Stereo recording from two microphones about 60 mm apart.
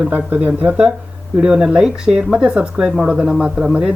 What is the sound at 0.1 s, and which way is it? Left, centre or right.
Speech, right.